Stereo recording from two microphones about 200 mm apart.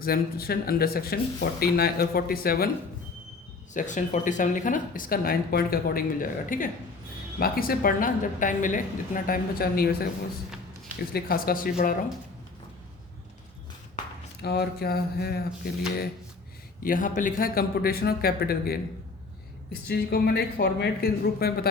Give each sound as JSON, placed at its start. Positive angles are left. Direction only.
{"t": 0.0, "sound": "a woman's voice", "side_deg": 50}
{"t": 3.8, "sound": "a woman's voice", "side_deg": 40}
{"t": 11.1, "sound": "a woman's voice", "side_deg": 50}
{"t": 14.4, "sound": "a woman's voice", "side_deg": 55}
{"t": 16.8, "sound": "a woman's voice", "side_deg": 45}
{"t": 19.9, "sound": "a woman's voice", "side_deg": 55}